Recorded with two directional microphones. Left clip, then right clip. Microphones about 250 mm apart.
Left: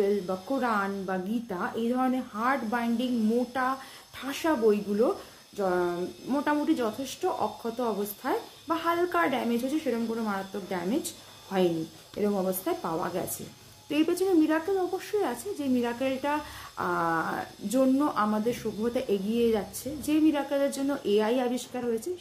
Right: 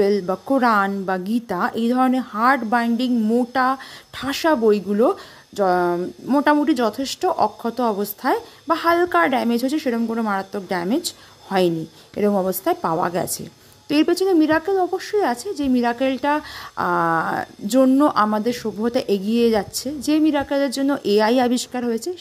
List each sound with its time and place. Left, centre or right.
0.0 s speech: right